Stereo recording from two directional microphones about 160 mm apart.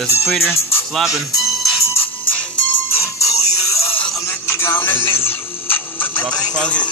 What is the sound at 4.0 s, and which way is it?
Music, 15° left (ahead or behind).